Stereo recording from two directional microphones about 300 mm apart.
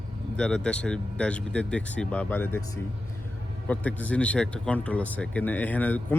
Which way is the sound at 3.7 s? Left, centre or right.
Centre.